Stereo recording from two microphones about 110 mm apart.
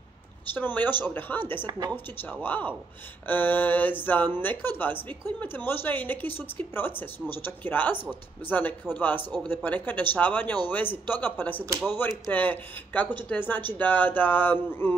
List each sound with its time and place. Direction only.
0.6 s a woman's voice: 20° left (ahead or behind)